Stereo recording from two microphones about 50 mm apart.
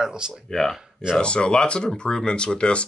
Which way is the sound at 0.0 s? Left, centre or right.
Centre.